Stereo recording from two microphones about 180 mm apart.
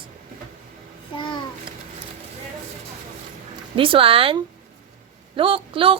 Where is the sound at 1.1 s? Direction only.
25° left (ahead or behind).